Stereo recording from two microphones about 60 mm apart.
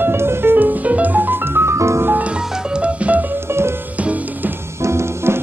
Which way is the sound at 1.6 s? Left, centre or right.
Right.